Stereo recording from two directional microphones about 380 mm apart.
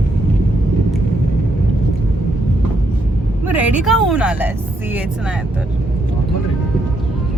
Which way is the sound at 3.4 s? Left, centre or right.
Centre.